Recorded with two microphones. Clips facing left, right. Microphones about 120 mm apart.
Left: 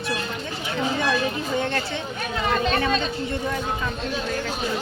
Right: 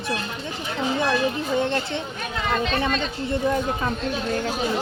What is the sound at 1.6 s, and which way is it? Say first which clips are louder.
Speech: right 2 dB; 25° right (ahead or behind).